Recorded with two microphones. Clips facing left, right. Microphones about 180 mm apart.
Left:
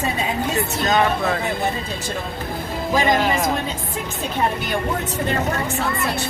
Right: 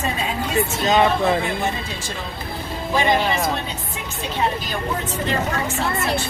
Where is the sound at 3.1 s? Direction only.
Centre (ahead or behind).